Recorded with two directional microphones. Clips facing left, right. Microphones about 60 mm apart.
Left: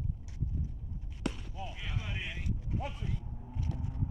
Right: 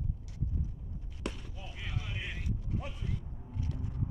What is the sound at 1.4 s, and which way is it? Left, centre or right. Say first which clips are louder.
Basketball bounce: left 5 dB; centre.